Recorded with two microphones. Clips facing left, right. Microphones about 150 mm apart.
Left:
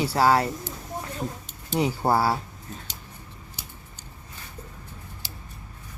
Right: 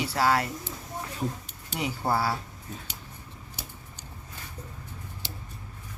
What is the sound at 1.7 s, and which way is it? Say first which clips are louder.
Speech: left 5 dB; 35° left (ahead or behind).